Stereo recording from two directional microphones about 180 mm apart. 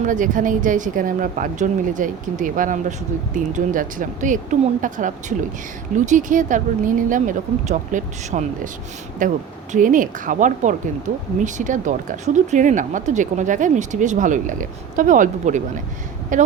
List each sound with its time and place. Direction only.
0.0 s speech: 45° right (ahead or behind)